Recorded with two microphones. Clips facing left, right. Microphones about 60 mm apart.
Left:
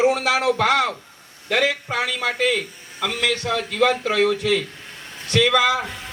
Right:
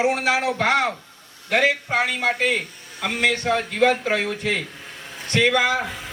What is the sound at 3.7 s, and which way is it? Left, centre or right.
Speech, left.